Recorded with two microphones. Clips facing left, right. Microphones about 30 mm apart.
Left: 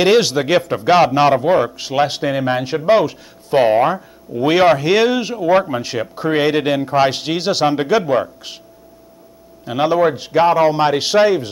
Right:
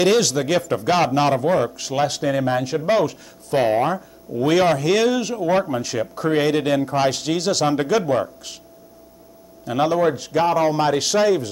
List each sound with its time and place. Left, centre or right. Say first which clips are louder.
0.0 s speech: left 4 dB; left
9.7 s speech: left 3 dB; left